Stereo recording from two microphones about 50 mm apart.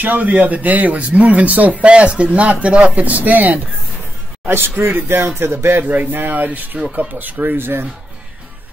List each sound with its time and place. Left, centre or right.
0.0 s speech: right
4.5 s a man's voice: right
5.2 s a man's voice: right
5.7 s speech: right